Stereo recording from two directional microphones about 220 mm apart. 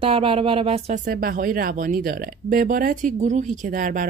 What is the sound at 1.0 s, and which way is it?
Speech, 40° right (ahead or behind).